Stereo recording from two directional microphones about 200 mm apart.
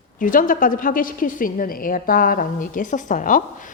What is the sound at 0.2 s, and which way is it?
A woman's voice, 45° left (ahead or behind).